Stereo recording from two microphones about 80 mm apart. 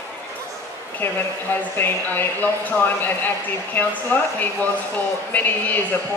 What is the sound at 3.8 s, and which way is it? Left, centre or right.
Speech, left.